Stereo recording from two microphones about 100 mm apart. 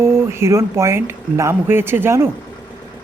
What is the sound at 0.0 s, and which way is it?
Speech, 25° right (ahead or behind).